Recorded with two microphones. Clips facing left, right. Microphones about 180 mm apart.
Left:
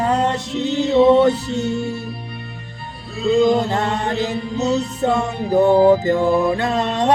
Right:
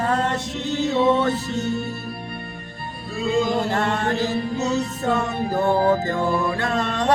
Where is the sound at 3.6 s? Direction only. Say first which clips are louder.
Left 1 dB; 20° left (ahead or behind).